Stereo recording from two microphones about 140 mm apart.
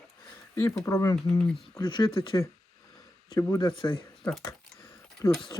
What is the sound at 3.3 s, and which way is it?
Speech, 25° left (ahead or behind).